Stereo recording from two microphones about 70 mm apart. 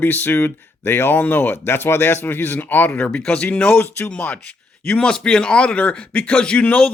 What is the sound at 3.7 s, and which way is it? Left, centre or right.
Speech, left.